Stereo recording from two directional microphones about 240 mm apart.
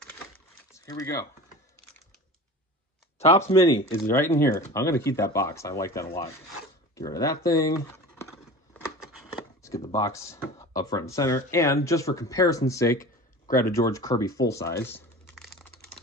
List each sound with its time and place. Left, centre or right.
0.7 s speech: centre
3.4 s speech: left
4.0 s speech: centre
9.8 s speech: centre
12.9 s a sound: left
13.7 s speech: centre